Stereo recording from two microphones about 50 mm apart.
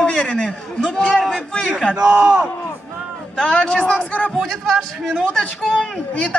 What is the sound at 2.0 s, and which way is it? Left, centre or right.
Speech, centre.